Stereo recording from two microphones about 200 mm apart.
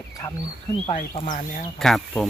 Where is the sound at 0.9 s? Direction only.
30° left (ahead or behind).